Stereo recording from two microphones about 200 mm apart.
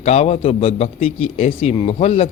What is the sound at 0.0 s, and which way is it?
A man's voice, 35° left (ahead or behind).